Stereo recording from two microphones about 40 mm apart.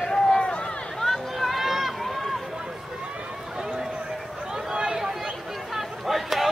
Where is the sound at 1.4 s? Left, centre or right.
Centre.